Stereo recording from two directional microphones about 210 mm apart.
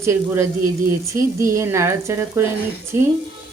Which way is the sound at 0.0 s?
15° right (ahead or behind).